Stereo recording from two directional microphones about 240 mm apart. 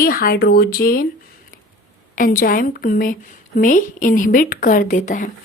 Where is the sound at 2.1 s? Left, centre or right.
Left.